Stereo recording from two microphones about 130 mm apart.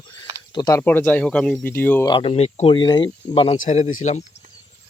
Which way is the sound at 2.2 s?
50° left (ahead or behind).